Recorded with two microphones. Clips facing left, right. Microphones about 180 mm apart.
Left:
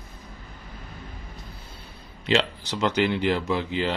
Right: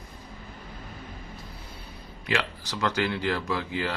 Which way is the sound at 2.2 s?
25° left (ahead or behind).